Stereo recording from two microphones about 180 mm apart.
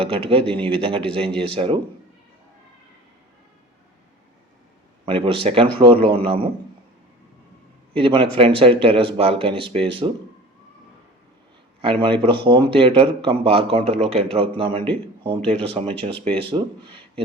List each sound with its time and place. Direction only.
0.0 s a man's voice: 30° right (ahead or behind)
5.0 s a man's voice: 30° right (ahead or behind)
7.9 s a man's voice: 30° right (ahead or behind)
11.8 s a man's voice: 30° right (ahead or behind)